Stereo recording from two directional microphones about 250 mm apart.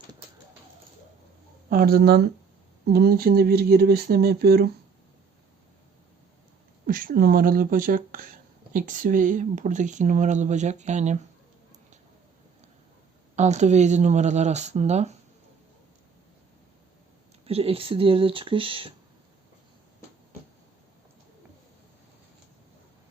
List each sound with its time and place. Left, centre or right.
1.7 s speech: right
6.8 s speech: right
13.3 s speech: right
17.4 s speech: right